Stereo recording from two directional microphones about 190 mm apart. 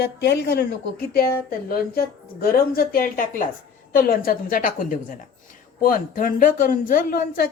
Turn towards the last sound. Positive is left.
turn(degrees=50)  # may be behind; listen again after turning